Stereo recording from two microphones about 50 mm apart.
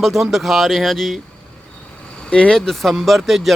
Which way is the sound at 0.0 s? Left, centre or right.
Centre.